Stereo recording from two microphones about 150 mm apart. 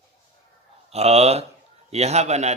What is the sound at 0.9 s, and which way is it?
Speech, 45° right (ahead or behind).